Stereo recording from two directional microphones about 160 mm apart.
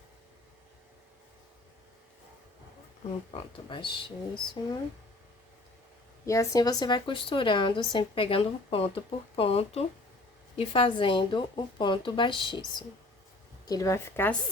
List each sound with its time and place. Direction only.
3.3 s a woman's voice: 30° left (ahead or behind)
6.2 s a woman's voice: 20° left (ahead or behind)
13.7 s a woman's voice: 20° left (ahead or behind)